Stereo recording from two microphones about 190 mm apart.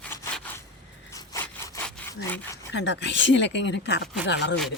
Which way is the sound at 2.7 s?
65° left (ahead or behind).